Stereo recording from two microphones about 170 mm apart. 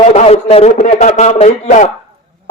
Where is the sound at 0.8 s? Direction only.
50° left (ahead or behind).